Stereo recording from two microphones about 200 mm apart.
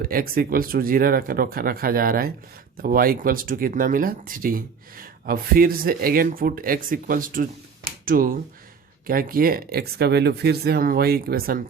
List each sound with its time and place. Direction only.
0.1 s speech: 45° right (ahead or behind)